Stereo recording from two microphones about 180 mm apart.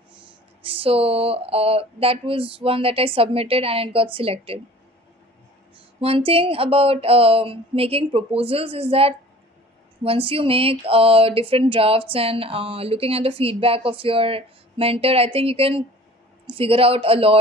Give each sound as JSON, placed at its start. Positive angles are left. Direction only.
{"t": 0.7, "sound": "speech", "side_deg": -30}
{"t": 5.9, "sound": "speech", "side_deg": -30}